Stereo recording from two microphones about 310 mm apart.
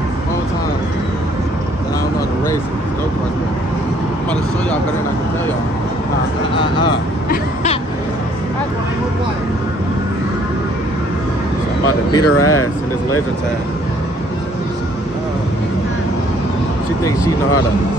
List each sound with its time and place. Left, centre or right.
6.6 s vehicle: centre
12.1 s speech: left